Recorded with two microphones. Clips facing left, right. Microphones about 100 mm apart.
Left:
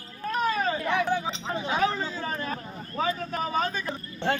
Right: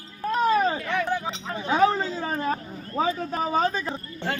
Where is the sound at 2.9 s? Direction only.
30° right (ahead or behind).